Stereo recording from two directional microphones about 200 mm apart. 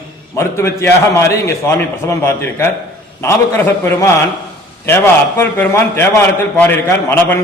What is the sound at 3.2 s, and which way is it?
A man's voice, 15° left (ahead or behind).